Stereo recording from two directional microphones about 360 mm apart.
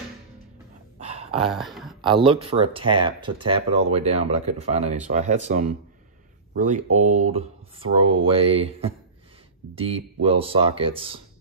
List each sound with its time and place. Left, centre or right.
1.5 s speech: centre
2.0 s speech: centre